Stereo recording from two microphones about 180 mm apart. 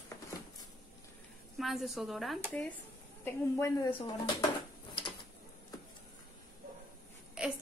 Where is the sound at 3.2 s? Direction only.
15° left (ahead or behind).